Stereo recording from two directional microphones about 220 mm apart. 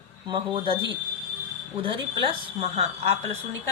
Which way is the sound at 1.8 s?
25° right (ahead or behind).